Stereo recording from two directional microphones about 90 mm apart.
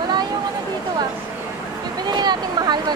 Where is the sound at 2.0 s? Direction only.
55° right (ahead or behind).